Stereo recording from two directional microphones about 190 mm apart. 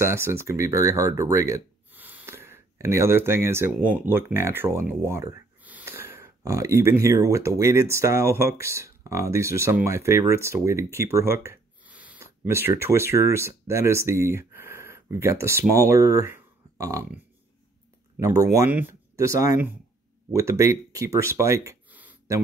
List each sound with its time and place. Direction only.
0.0 s speech: 15° right (ahead or behind)
18.2 s speech: 15° right (ahead or behind)